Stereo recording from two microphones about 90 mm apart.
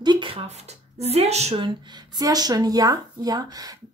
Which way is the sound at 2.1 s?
45° right (ahead or behind).